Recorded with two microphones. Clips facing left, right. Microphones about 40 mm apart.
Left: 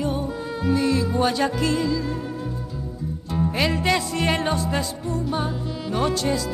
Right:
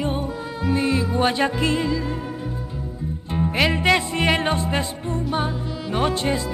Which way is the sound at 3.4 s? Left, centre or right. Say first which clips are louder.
Right 2 dB; right.